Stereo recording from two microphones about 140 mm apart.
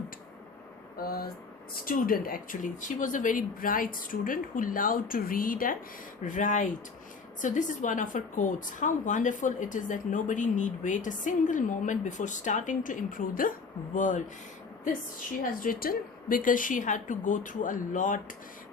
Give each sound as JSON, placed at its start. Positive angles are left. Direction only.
{"t": 0.9, "sound": "speech", "side_deg": 90}
{"t": 6.2, "sound": "speech", "side_deg": 65}
{"t": 15.6, "sound": "speech", "side_deg": 90}